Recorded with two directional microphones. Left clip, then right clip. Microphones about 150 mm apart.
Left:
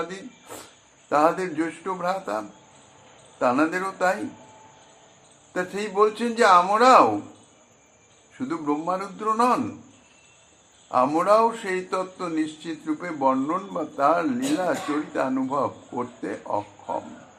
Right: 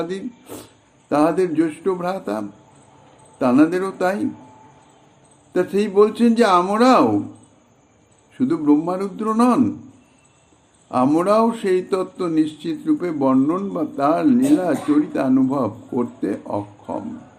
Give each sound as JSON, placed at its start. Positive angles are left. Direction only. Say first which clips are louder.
{"t": 0.1, "sound": "speech", "louder": "right 8 dB", "side_deg": -55}
{"t": 5.5, "sound": "speech", "louder": "right 6 dB", "side_deg": -55}
{"t": 8.4, "sound": "speech", "louder": "right 9 dB", "side_deg": -55}
{"t": 10.8, "sound": "speech", "louder": "right 2 dB", "side_deg": -60}